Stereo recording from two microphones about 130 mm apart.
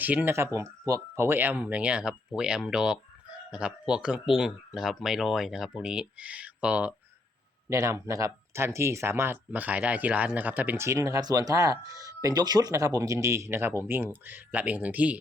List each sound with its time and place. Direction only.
0.0 s speech: 15° right (ahead or behind)
7.7 s speech: 25° right (ahead or behind)